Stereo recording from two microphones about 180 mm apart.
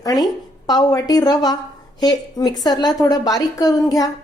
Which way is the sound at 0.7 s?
20° left (ahead or behind).